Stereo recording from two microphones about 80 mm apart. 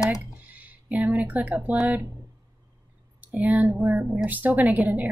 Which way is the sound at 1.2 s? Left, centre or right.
Right.